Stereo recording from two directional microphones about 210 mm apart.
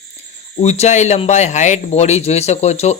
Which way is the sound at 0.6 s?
30° left (ahead or behind).